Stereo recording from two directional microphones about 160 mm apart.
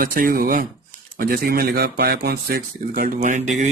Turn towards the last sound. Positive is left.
turn(degrees=-50)  # may be behind; listen again after turning